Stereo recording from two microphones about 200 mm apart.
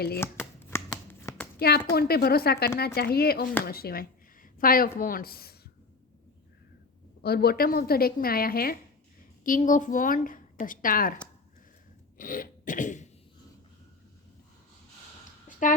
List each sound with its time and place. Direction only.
0.2 s shuffling cards: 10° left (ahead or behind)
1.2 s hands: 15° left (ahead or behind)
1.5 s a woman's voice: 50° left (ahead or behind)
7.2 s a woman's voice: 50° left (ahead or behind)
12.1 s throat clearing: 45° left (ahead or behind)
15.4 s a sound: 40° left (ahead or behind)